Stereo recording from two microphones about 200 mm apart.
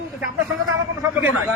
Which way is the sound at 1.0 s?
10° right (ahead or behind).